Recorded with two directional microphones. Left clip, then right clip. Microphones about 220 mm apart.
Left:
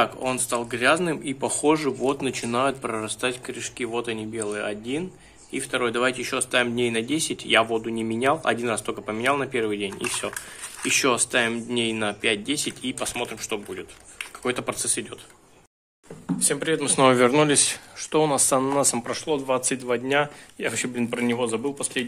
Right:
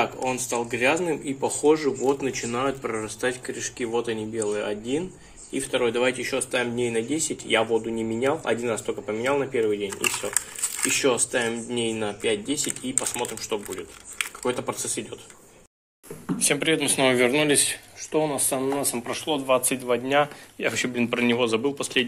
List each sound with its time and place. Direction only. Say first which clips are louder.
0.2 s speech: even; 20° left (ahead or behind)
10.9 s speech: left 2 dB; 25° left (ahead or behind)
16.3 s speech: right 2 dB; 5° left (ahead or behind)
16.9 s speech: left 6 dB; 25° left (ahead or behind)
18.6 s speech: left 4 dB; 30° left (ahead or behind); by 22.0 s 5° left (ahead or behind)